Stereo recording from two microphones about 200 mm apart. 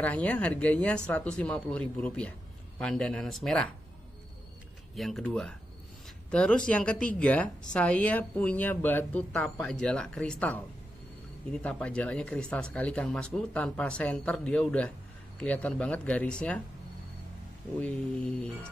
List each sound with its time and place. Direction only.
0.0 s speech: 5° left (ahead or behind)
4.9 s speech: centre (ahead or behind)
17.7 s speech: 5° left (ahead or behind)